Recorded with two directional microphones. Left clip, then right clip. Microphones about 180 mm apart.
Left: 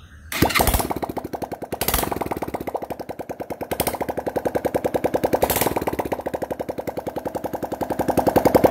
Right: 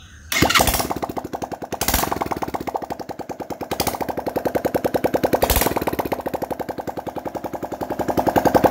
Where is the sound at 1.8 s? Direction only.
5° right (ahead or behind).